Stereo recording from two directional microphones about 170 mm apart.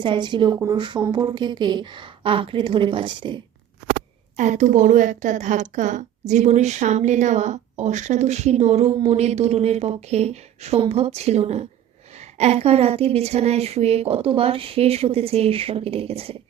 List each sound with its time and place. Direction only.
0.0 s a woman's voice: 30° right (ahead or behind)
4.4 s a woman's voice: 45° right (ahead or behind)